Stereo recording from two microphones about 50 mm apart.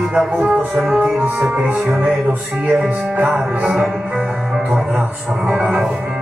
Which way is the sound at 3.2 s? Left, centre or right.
Right.